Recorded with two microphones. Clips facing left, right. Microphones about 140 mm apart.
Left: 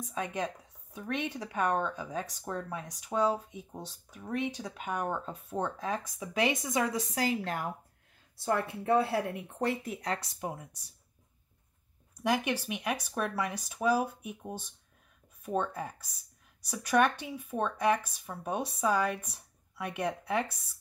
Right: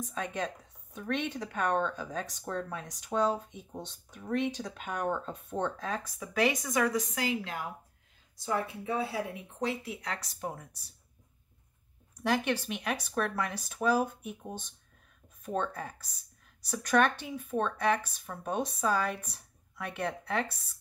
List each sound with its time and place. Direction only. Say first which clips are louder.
0.0 s speech: even; 10° left (ahead or behind); by 7.7 s 50° left (ahead or behind)
8.5 s speech: left 4 dB; 60° left (ahead or behind)
10.4 s speech: even; 15° left (ahead or behind)
12.2 s speech: even; 15° left (ahead or behind)